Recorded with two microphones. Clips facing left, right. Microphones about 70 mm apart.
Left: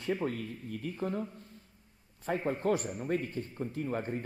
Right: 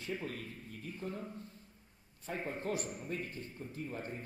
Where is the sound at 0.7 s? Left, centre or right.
Left.